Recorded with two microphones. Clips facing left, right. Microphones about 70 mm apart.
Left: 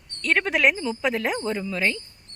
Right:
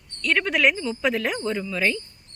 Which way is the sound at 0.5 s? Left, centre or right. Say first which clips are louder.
Even; centre.